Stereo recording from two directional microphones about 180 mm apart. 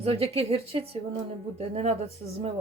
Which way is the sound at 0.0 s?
35° right (ahead or behind).